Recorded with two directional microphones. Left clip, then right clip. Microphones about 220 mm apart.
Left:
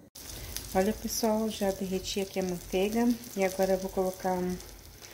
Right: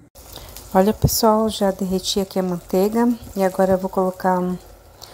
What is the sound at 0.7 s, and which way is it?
Speech, 25° right (ahead or behind).